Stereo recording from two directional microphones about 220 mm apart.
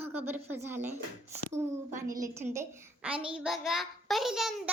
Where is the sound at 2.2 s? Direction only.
10° right (ahead or behind).